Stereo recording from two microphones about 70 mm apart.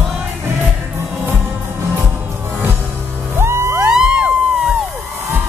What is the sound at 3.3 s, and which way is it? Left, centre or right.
Music, right.